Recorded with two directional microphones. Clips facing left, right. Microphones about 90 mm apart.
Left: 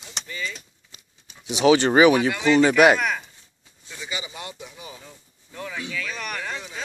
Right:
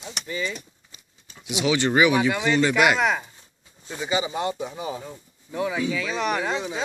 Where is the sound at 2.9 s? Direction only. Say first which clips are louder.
Right 3 dB; 20° right (ahead or behind); by 5.0 s 40° right (ahead or behind).